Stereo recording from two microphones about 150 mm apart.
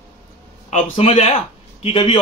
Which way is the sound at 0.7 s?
40° left (ahead or behind).